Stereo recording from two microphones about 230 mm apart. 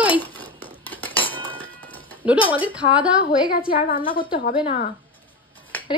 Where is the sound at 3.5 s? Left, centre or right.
Left.